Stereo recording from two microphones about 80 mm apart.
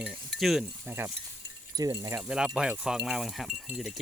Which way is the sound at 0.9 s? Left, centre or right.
Right.